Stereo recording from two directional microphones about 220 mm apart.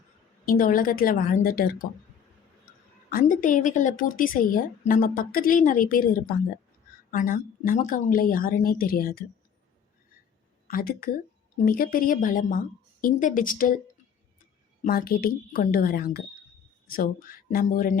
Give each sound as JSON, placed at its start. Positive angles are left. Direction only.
{"t": 0.4, "sound": "a woman's voice", "side_deg": 40}
{"t": 3.1, "sound": "a woman's voice", "side_deg": 40}
{"t": 10.7, "sound": "a woman's voice", "side_deg": 40}
{"t": 14.8, "sound": "a woman's voice", "side_deg": 40}